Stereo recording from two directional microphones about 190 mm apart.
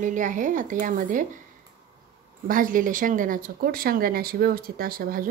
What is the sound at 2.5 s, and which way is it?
Speech, 45° right (ahead or behind).